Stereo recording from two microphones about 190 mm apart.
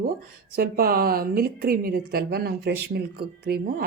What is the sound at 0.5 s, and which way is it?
A woman's voice, 50° right (ahead or behind).